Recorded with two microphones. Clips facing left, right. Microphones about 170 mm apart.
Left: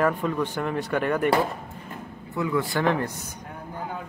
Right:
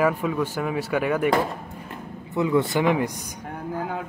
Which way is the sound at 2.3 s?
20° right (ahead or behind).